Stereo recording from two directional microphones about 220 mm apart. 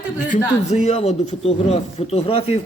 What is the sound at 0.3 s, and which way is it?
Speech, 30° left (ahead or behind).